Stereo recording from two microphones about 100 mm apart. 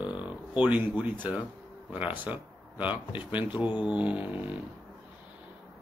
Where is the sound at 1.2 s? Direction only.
15° right (ahead or behind).